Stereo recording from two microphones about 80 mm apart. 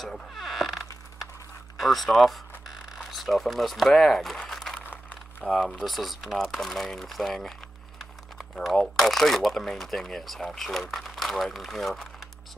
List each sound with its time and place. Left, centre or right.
0.0 s creak: centre
1.8 s speech: centre
4.4 s crumpling: centre
4.7 s crumpling: centre
5.4 s speech: centre